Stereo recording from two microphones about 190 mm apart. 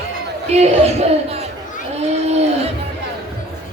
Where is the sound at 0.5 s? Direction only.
35° right (ahead or behind).